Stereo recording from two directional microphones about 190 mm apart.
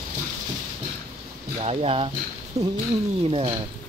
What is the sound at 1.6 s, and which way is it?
Speech, 30° right (ahead or behind).